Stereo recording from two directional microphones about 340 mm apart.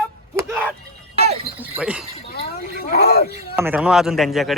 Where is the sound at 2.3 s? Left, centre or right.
Left.